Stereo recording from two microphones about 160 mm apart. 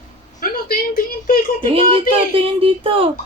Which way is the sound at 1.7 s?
35° right (ahead or behind).